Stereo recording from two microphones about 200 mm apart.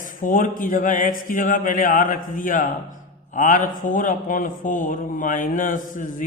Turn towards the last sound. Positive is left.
turn(degrees=40)  # may be behind; listen again after turning